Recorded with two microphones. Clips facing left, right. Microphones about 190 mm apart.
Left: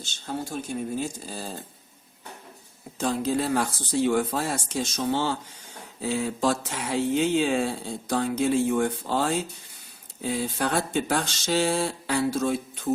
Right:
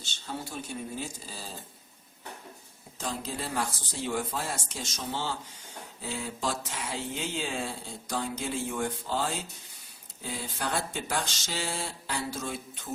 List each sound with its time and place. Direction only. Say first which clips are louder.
0.5 s speech: left 7 dB; 50° left (ahead or behind)
3.0 s speech: left 10 dB; 65° left (ahead or behind)
10.4 s speech: left 4 dB; 60° left (ahead or behind)